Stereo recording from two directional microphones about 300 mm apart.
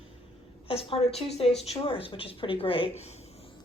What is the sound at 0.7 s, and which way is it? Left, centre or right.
A woman's voice, centre.